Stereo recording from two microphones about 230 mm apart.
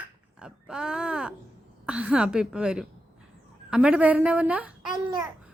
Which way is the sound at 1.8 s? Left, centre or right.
Centre.